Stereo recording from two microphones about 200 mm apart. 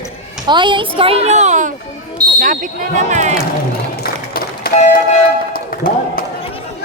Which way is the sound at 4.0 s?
50° left (ahead or behind).